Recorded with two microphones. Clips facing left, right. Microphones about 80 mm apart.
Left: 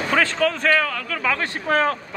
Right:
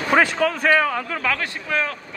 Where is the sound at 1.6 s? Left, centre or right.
Left.